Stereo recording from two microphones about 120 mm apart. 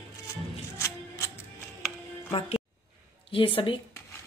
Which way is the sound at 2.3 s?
60° left (ahead or behind).